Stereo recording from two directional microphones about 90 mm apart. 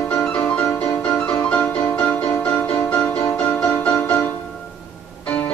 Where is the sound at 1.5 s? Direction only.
10° left (ahead or behind).